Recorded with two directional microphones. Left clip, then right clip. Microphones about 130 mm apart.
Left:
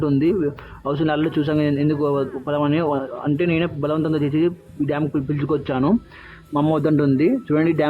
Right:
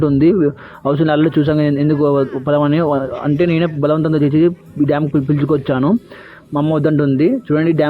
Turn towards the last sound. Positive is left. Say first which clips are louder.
# right 4 dB
turn(degrees=-25)  # may be behind; listen again after turning